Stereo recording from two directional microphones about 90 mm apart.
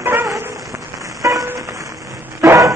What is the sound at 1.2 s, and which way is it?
Music, 35° right (ahead or behind).